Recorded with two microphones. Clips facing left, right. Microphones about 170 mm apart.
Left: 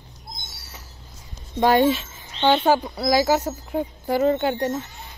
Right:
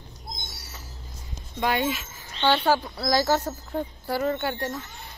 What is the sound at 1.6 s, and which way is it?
Speech, 40° left (ahead or behind).